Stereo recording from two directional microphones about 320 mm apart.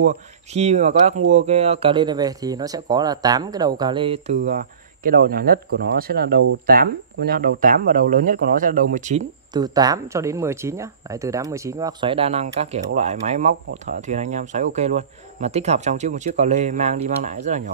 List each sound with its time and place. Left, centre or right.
0.0 s speech: right
5.0 s speech: right